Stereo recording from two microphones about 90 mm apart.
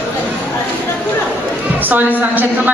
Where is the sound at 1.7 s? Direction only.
20° right (ahead or behind).